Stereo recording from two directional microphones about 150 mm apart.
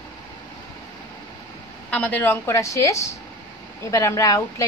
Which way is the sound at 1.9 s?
10° left (ahead or behind).